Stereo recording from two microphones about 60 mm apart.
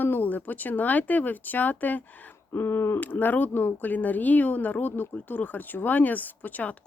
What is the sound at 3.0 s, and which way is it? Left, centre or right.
Speech, left.